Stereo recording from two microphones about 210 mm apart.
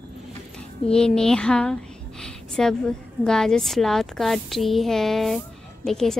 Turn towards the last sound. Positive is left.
turn(degrees=0)  # may be behind; listen again after turning